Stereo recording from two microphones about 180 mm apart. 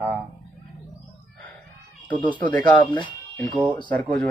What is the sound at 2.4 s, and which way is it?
Speech, 25° left (ahead or behind).